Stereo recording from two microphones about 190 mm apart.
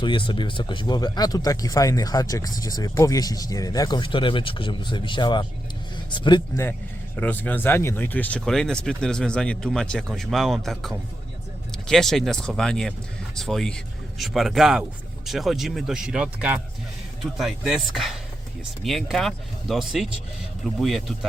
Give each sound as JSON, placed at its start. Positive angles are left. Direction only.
{"t": 0.0, "sound": "speech", "side_deg": 25}
{"t": 7.2, "sound": "speech", "side_deg": 10}